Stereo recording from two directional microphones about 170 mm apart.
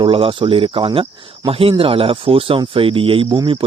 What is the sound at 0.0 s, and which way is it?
Speech, 30° right (ahead or behind).